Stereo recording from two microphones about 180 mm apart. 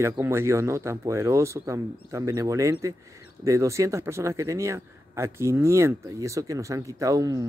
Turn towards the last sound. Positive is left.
turn(degrees=-20)  # may be behind; listen again after turning